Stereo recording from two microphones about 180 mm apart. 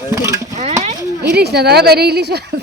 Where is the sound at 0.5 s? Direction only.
40° right (ahead or behind).